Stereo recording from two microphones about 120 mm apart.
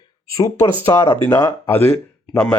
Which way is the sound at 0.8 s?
20° left (ahead or behind).